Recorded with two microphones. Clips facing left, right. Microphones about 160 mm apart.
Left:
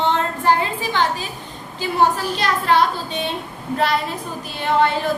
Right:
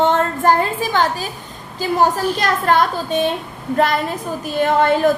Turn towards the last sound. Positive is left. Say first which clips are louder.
# right 4 dB
turn(degrees=-45)  # may be behind; listen again after turning